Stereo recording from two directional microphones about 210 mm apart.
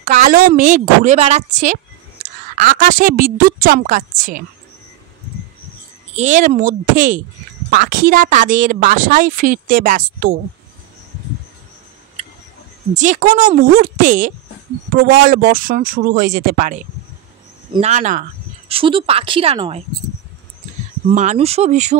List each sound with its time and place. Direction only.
0.0 s a woman's voice: 35° right (ahead or behind)
6.1 s a woman's voice: 35° right (ahead or behind)
12.9 s a woman's voice: 35° right (ahead or behind)
18.7 s a woman's voice: 25° right (ahead or behind)
21.1 s a woman's voice: 35° right (ahead or behind)